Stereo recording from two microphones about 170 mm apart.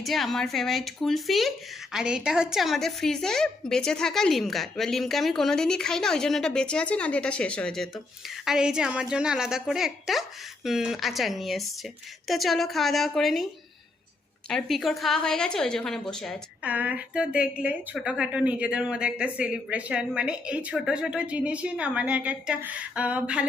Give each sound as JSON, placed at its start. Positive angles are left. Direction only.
{"t": 0.0, "sound": "speech", "side_deg": 0}
{"t": 16.6, "sound": "a woman's voice", "side_deg": -10}